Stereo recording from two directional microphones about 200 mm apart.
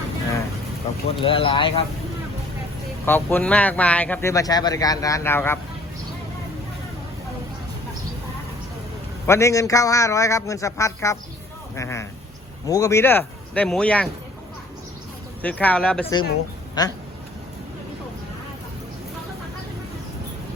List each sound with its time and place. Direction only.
1.2 s speech: 25° left (ahead or behind)
3.1 s speech: 10° left (ahead or behind)
9.2 s speech: 15° left (ahead or behind)
15.4 s speech: 5° left (ahead or behind)
16.8 s speech: 20° left (ahead or behind)